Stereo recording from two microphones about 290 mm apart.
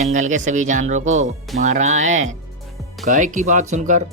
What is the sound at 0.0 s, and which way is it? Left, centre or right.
Speech, right.